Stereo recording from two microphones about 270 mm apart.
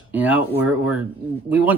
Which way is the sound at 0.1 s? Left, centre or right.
Centre.